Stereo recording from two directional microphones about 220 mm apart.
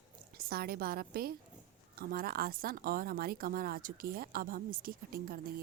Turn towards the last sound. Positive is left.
turn(degrees=-40)  # may be behind; listen again after turning